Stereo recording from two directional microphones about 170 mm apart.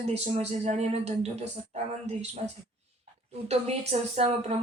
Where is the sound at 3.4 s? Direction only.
40° right (ahead or behind).